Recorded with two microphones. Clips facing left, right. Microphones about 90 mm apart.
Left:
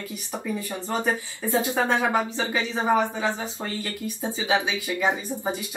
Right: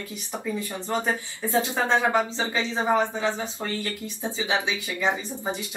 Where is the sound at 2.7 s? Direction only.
20° left (ahead or behind).